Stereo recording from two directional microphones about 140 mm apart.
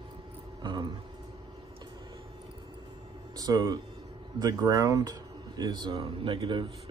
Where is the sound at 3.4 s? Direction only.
25° right (ahead or behind).